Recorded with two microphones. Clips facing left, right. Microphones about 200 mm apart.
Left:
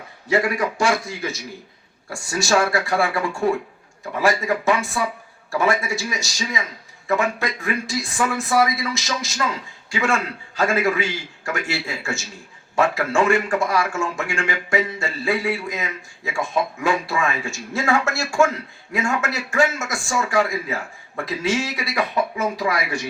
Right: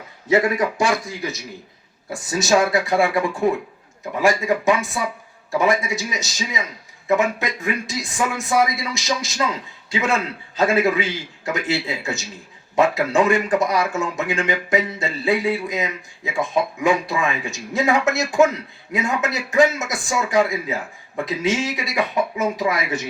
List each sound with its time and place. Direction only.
0.3 s a man's voice: 20° right (ahead or behind)